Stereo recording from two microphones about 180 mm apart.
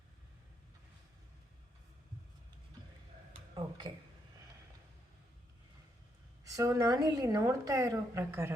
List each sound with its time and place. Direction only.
3.5 s speech: 25° right (ahead or behind)
6.4 s a woman's voice: 15° right (ahead or behind)